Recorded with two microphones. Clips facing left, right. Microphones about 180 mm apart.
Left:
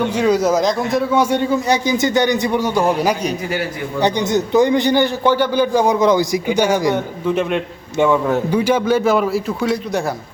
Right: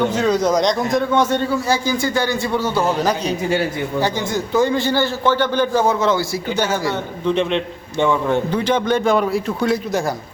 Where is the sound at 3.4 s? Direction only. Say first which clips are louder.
Right 3 dB; 25° right (ahead or behind).